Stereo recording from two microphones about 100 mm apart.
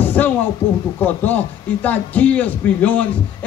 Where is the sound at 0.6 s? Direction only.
60° left (ahead or behind).